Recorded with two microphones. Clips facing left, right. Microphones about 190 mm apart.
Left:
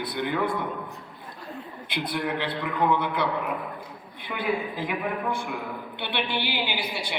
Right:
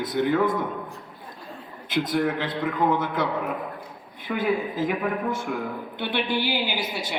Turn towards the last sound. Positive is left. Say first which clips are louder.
# right 2 dB
turn(degrees=-45)  # may be behind; listen again after turning